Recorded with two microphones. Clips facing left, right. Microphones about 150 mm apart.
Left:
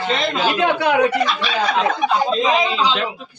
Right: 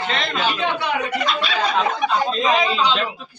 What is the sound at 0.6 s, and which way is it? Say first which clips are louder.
Speech: left 6 dB; 90° left.